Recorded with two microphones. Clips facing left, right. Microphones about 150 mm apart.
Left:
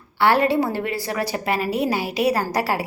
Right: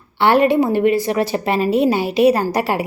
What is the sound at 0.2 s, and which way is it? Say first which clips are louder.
A woman's voice: right 4 dB; 20° right (ahead or behind).